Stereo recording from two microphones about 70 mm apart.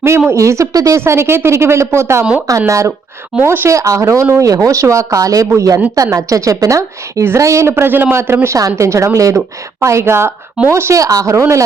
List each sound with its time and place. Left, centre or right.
0.3 s a woman's voice: right
3.4 s a woman's voice: right
3.7 s a woman's voice: right
8.4 s a woman's voice: right
11.0 s speech: right